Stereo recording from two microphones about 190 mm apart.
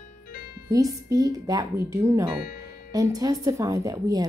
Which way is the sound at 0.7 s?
15° right (ahead or behind).